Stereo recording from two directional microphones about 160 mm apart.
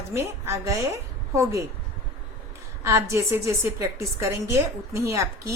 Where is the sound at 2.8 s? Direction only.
15° right (ahead or behind).